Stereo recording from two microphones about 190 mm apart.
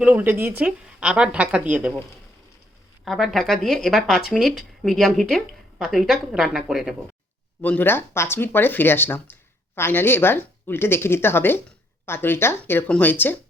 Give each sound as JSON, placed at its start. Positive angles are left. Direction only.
{"t": 0.0, "sound": "a woman's voice", "side_deg": -10}
{"t": 7.6, "sound": "a woman's voice", "side_deg": 10}